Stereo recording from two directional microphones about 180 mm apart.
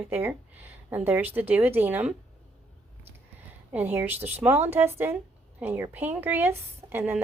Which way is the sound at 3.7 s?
10° right (ahead or behind).